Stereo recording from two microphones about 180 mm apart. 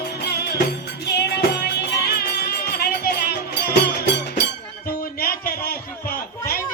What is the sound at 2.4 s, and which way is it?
Music, 60° left (ahead or behind).